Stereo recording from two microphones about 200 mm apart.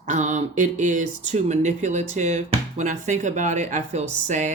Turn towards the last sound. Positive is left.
turn(degrees=-35)  # may be behind; listen again after turning